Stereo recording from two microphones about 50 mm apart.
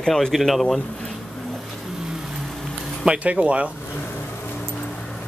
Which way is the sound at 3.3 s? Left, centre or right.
Right.